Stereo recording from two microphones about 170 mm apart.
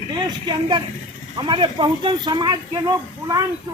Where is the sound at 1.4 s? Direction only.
25° right (ahead or behind).